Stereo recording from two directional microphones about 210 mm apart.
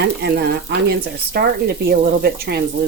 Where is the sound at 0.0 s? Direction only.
50° right (ahead or behind).